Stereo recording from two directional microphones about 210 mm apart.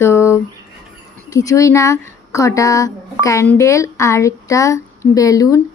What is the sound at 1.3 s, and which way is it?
Speech, 15° left (ahead or behind).